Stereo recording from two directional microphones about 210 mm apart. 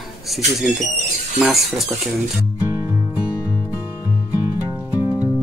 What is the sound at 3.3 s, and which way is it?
Music, 10° left (ahead or behind).